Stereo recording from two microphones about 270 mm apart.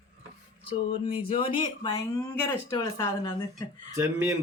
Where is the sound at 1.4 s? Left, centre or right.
Centre.